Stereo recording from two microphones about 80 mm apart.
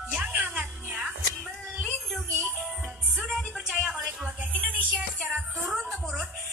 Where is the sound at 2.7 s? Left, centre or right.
Centre.